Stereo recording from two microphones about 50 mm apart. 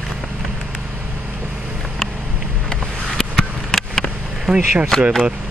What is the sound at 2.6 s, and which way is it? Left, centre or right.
Vehicle, centre.